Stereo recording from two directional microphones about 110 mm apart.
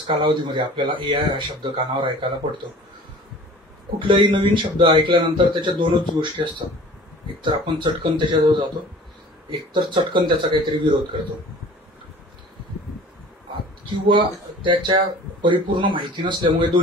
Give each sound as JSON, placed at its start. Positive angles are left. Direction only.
{"t": 0.0, "sound": "speech", "side_deg": -50}
{"t": 4.1, "sound": "speech", "side_deg": -50}
{"t": 9.8, "sound": "speech", "side_deg": -45}
{"t": 13.8, "sound": "speech", "side_deg": -50}